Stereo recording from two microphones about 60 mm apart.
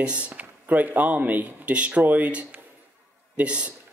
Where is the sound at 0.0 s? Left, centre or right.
Centre.